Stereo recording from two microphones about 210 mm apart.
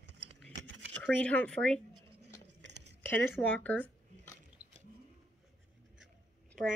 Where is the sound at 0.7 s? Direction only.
60° right (ahead or behind).